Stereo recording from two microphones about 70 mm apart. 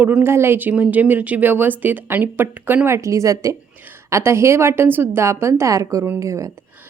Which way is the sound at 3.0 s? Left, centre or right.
Right.